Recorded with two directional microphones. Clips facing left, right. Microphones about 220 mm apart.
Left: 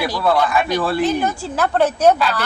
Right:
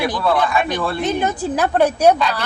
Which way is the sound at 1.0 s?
20° right (ahead or behind).